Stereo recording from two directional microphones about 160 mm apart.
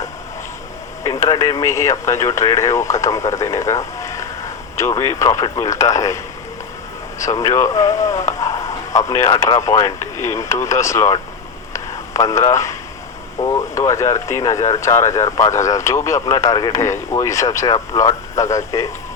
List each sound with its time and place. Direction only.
1.0 s speech: 20° left (ahead or behind)
7.2 s speech: 20° left (ahead or behind)
11.7 s a sound: 20° left (ahead or behind)
13.4 s speech: 20° left (ahead or behind)